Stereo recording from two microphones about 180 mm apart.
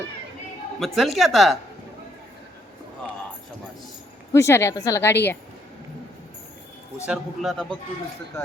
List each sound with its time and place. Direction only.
0.9 s a man's voice: centre (ahead or behind)
4.3 s speech: 15° left (ahead or behind)
7.0 s a man's voice: centre (ahead or behind)